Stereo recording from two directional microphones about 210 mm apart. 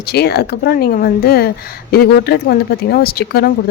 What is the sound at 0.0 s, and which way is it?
Speech, 50° left (ahead or behind).